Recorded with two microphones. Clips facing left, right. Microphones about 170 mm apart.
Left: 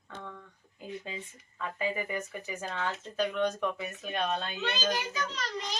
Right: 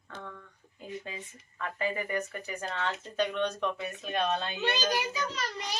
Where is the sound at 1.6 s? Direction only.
15° left (ahead or behind); by 5.8 s 10° right (ahead or behind).